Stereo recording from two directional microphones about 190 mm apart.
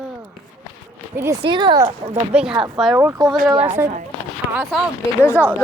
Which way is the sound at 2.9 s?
15° right (ahead or behind).